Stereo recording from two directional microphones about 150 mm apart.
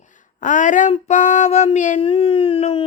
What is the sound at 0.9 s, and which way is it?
Child singing, 50° left (ahead or behind).